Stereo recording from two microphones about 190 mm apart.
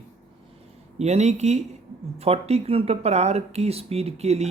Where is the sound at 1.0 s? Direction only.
35° right (ahead or behind).